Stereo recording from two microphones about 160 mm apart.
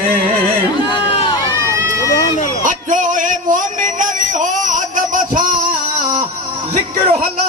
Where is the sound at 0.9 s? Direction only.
30° left (ahead or behind).